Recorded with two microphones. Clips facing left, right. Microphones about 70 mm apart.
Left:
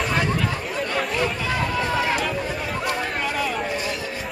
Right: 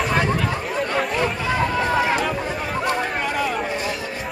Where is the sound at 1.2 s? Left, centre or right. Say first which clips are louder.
Right 2 dB; centre.